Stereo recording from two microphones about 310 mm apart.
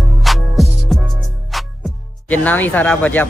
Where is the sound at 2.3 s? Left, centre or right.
Centre.